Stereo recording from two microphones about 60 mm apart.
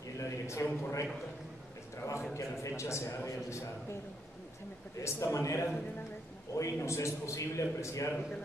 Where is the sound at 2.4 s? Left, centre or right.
Left.